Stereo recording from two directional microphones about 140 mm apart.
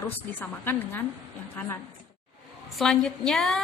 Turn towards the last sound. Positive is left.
turn(degrees=5)  # may be behind; listen again after turning